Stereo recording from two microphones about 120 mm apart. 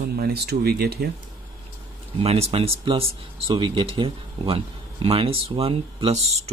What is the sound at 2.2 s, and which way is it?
Speech, 55° right (ahead or behind).